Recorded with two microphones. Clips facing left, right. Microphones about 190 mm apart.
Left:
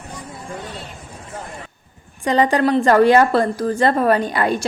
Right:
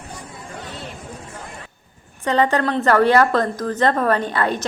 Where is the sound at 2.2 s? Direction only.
15° left (ahead or behind).